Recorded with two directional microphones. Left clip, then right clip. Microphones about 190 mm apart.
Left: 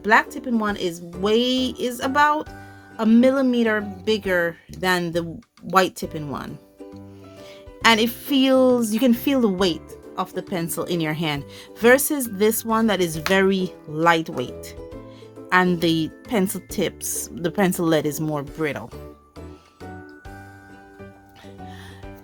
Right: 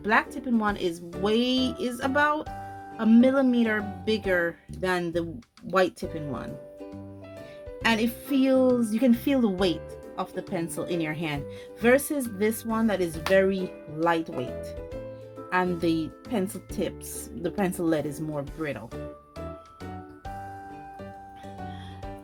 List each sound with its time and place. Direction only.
0.0 s a woman's voice: 25° left (ahead or behind)
7.8 s a woman's voice: 40° left (ahead or behind)